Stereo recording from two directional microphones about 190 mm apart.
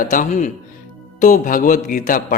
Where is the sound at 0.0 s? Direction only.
45° left (ahead or behind).